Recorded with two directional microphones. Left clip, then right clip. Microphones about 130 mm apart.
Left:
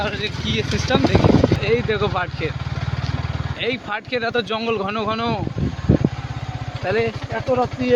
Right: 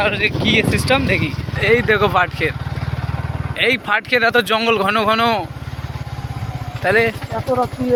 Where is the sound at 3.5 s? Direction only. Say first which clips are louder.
Right 8 dB; 15° right (ahead or behind).